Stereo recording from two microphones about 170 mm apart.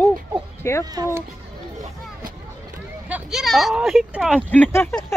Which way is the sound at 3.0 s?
5° right (ahead or behind).